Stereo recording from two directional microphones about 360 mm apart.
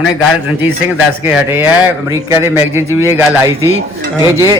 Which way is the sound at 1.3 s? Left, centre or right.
Centre.